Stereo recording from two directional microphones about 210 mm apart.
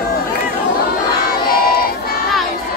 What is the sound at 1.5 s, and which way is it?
Battle cry, 45° left (ahead or behind).